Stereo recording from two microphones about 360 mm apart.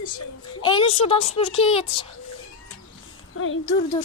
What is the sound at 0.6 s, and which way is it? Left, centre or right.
A child's voice, centre.